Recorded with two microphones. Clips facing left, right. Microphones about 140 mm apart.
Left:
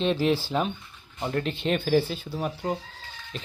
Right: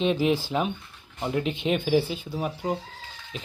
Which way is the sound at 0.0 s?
10° right (ahead or behind).